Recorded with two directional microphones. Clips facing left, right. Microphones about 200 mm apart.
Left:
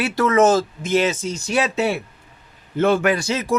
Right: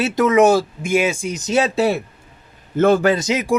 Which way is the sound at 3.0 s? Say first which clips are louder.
Right 3 dB; 20° right (ahead or behind).